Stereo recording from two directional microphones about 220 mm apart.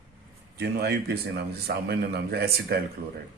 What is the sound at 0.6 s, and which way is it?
A man's voice, 45° right (ahead or behind).